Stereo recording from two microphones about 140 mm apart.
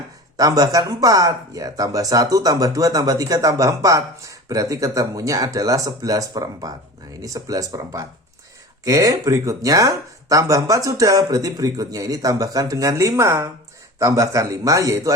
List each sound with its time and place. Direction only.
0.3 s speech: 25° right (ahead or behind)